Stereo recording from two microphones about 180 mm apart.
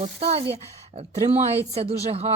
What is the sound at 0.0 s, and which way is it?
Speech, 35° right (ahead or behind).